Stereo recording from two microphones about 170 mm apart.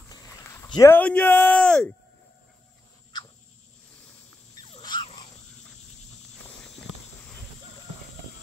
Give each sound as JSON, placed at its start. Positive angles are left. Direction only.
{"t": 0.5, "sound": "speech", "side_deg": 15}
{"t": 4.6, "sound": "dog", "side_deg": 30}